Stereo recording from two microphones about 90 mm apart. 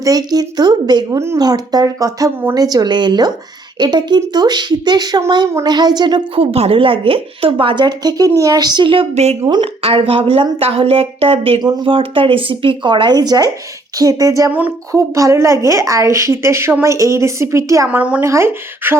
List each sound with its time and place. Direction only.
0.0 s a woman's voice: 45° right (ahead or behind); by 7.5 s 90° right
7.6 s a woman's voice: 65° right (ahead or behind)
9.5 s speech: 80° right
11.6 s a woman's voice: 70° right (ahead or behind); by 17.8 s 35° right (ahead or behind)
17.8 s a woman's voice: 15° right (ahead or behind)
18.2 s speech: 30° right (ahead or behind)